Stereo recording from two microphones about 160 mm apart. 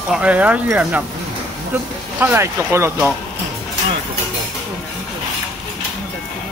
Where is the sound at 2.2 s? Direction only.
15° right (ahead or behind).